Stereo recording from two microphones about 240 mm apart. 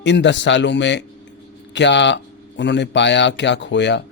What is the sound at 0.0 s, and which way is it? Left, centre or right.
Speech, left.